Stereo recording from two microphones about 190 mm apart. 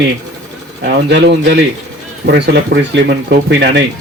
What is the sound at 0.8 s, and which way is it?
Speech, 65° right (ahead or behind).